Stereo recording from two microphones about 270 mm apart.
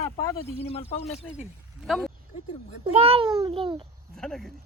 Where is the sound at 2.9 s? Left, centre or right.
Right.